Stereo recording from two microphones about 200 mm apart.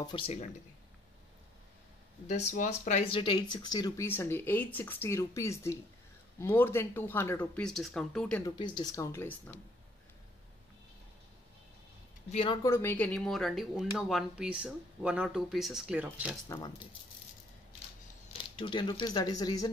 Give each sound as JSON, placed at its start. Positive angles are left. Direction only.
{"t": 0.0, "sound": "speech", "side_deg": 25}
{"t": 2.2, "sound": "speech", "side_deg": 35}
{"t": 8.4, "sound": "speech", "side_deg": 20}
{"t": 12.3, "sound": "speech", "side_deg": 30}
{"t": 12.6, "sound": "speech", "side_deg": 10}
{"t": 16.4, "sound": "speech", "side_deg": 20}
{"t": 18.6, "sound": "speech", "side_deg": 25}